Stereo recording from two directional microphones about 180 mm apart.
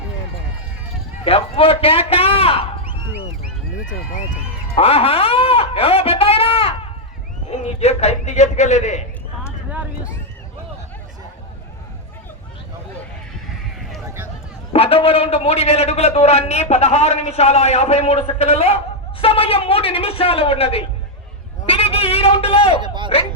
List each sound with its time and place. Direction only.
1.2 s a man's voice: 30° left (ahead or behind)
3.8 s speech: 45° left (ahead or behind)
4.8 s a man's voice: 35° left (ahead or behind)
9.6 s a sound: 5° right (ahead or behind)
14.7 s a man's voice: 30° left (ahead or behind)
21.7 s a sound: 30° left (ahead or behind)
23.1 s a man's voice: 35° left (ahead or behind)